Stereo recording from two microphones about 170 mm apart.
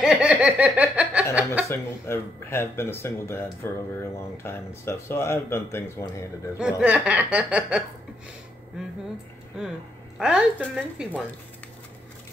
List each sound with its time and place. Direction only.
0.0 s laughter: 5° right (ahead or behind)
1.3 s chuckle: 10° right (ahead or behind)
1.7 s speech: 15° left (ahead or behind)
6.8 s speech: 10° right (ahead or behind)
10.1 s a woman's voice: 5° right (ahead or behind)